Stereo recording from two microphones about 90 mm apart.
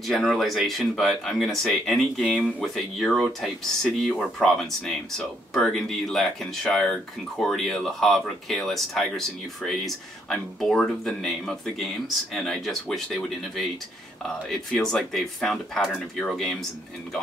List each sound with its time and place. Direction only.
0.0 s speech: centre (ahead or behind)